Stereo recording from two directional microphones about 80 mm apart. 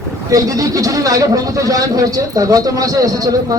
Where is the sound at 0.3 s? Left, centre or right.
Right.